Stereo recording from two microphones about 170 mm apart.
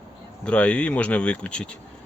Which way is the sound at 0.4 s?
5° left (ahead or behind).